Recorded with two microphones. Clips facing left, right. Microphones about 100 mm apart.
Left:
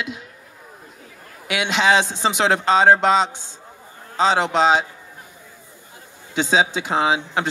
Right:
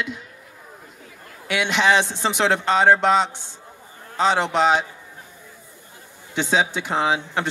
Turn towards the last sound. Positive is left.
turn(degrees=20)  # may be behind; listen again after turning